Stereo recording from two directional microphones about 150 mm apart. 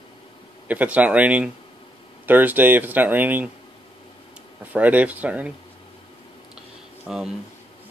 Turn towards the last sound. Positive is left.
turn(degrees=-5)  # may be behind; listen again after turning